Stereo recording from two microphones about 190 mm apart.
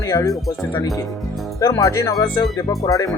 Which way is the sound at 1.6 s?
15° left (ahead or behind).